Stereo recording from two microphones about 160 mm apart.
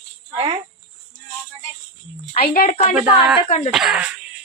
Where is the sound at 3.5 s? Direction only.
50° left (ahead or behind).